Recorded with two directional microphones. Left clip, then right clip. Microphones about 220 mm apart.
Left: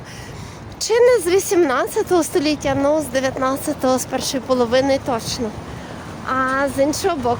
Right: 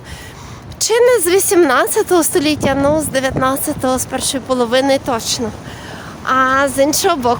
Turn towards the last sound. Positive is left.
turn(degrees=-25)  # may be behind; listen again after turning